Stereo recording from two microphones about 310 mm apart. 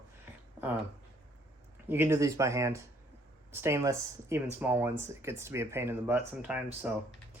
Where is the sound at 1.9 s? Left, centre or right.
Centre.